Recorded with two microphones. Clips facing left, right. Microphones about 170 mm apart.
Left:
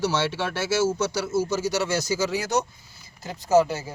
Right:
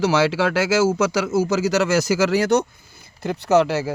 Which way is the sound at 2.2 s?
70° right (ahead or behind).